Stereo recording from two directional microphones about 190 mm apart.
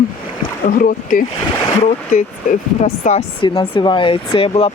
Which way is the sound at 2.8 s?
35° left (ahead or behind).